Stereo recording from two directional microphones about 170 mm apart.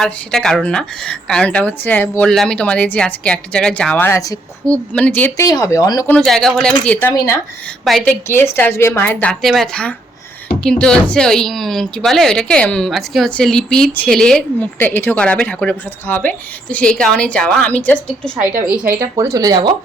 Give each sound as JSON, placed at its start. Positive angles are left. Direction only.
{"t": 0.0, "sound": "speech", "side_deg": 5}
{"t": 4.6, "sound": "a woman's voice", "side_deg": 5}
{"t": 6.1, "sound": "speech", "side_deg": 5}
{"t": 7.1, "sound": "a woman's voice", "side_deg": 20}
{"t": 7.9, "sound": "speech", "side_deg": 5}
{"t": 18.4, "sound": "speech", "side_deg": -5}